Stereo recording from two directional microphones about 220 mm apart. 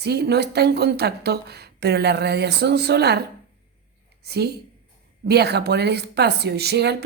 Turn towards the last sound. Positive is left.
turn(degrees=-50)  # may be behind; listen again after turning